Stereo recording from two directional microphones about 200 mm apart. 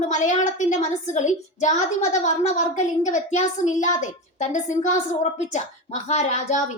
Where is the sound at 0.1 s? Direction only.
35° left (ahead or behind).